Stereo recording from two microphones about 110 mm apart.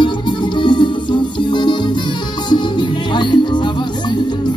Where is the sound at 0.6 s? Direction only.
45° left (ahead or behind).